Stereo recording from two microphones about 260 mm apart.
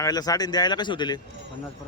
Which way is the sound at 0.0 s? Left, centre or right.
Centre.